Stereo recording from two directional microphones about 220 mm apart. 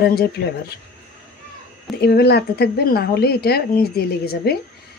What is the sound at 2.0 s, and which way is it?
Speech, 45° left (ahead or behind).